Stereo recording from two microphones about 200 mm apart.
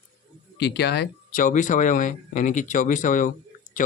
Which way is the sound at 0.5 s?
55° left (ahead or behind).